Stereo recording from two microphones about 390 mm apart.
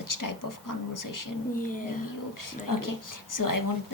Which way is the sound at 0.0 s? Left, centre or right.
Left.